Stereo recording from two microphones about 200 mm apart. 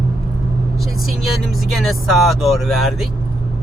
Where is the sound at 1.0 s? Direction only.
Centre (ahead or behind).